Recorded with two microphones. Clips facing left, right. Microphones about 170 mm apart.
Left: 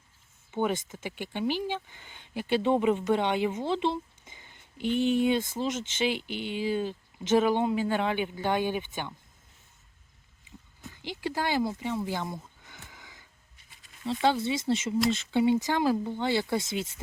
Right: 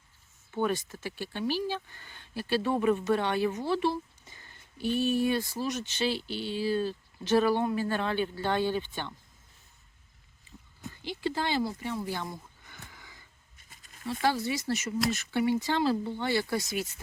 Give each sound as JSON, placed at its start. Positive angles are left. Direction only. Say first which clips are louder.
{"t": 0.5, "sound": "speech", "louder": "left 1 dB", "side_deg": 20}
{"t": 10.9, "sound": "speech", "louder": "even", "side_deg": 15}
{"t": 12.9, "sound": "a sound", "louder": "left 1 dB", "side_deg": 15}
{"t": 14.0, "sound": "speech", "louder": "left 3 dB", "side_deg": 20}